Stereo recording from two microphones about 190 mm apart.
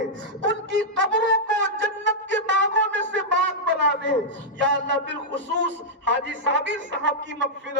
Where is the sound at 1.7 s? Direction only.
75° right (ahead or behind).